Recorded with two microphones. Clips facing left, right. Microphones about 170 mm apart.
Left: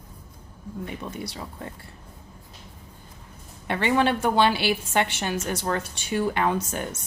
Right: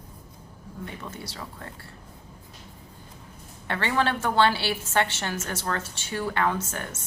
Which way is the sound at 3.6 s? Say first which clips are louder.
Left 4 dB; 15° left (ahead or behind).